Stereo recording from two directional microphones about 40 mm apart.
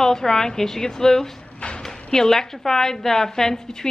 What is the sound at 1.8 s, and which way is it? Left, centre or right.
A woman's voice, centre.